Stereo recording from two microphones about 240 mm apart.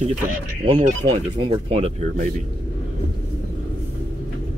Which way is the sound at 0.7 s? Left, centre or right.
Centre.